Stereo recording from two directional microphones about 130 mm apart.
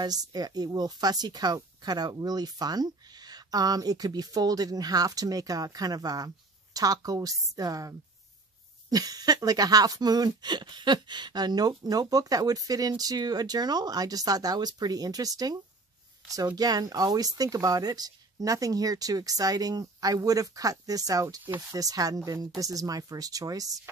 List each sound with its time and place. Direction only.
0.0 s speech: 30° right (ahead or behind)
8.9 s speech: 30° right (ahead or behind)